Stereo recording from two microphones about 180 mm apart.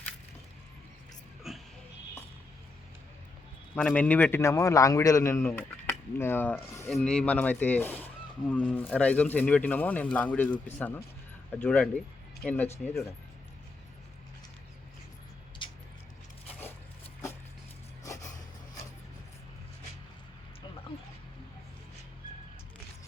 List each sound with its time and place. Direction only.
1.5 s a sound: centre (ahead or behind)
3.8 s a man's voice: 5° left (ahead or behind)
15.6 s vehicle: 25° left (ahead or behind)